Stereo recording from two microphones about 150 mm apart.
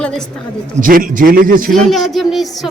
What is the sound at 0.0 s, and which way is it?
Speech, 5° left (ahead or behind).